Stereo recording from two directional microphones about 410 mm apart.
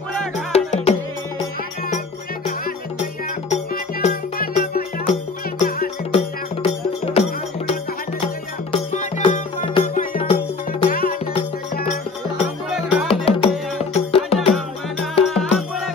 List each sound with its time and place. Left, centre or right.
0.5 s music: centre
4.0 s music: centre
8.7 s music: centre
12.7 s music: centre
13.1 s music: centre
15.2 s music: centre